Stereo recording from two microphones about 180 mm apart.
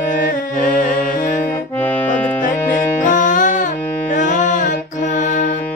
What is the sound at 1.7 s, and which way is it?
Accordion, 10° left (ahead or behind).